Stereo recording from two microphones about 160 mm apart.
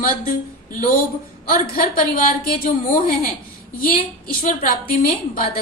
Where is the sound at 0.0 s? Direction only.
60° left (ahead or behind).